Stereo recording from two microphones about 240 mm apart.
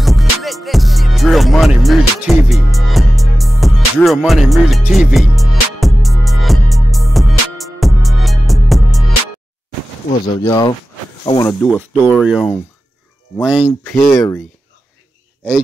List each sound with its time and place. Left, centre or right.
0.0 s music: centre
10.4 s speech: centre
14.0 s speech: centre